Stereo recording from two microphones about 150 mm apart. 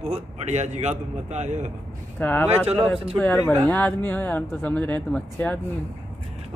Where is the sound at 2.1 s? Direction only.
10° left (ahead or behind).